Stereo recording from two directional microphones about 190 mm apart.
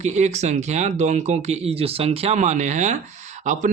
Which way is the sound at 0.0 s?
35° right (ahead or behind).